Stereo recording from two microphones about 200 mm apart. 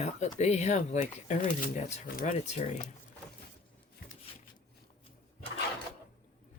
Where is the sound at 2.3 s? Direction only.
35° left (ahead or behind).